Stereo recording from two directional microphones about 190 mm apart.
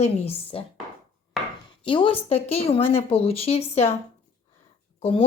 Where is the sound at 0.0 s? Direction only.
30° left (ahead or behind).